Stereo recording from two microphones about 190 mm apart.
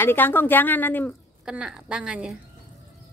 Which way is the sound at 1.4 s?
5° right (ahead or behind).